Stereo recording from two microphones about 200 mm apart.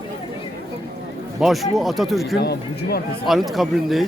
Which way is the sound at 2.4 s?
55° left (ahead or behind).